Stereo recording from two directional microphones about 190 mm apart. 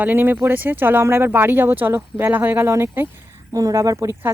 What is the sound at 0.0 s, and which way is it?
Speech, 10° right (ahead or behind).